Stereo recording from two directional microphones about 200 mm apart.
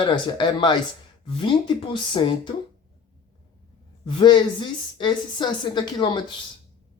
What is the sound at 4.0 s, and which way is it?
A woman's voice, 25° left (ahead or behind).